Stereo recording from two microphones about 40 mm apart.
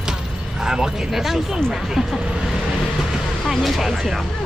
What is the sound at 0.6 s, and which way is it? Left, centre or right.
Speech, centre.